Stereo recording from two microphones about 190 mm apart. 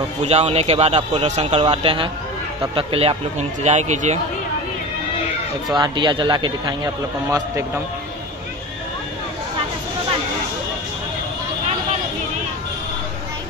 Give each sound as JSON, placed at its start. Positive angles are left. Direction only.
{"t": 0.2, "sound": "a man's voice", "side_deg": -35}
{"t": 5.8, "sound": "a man's voice", "side_deg": -25}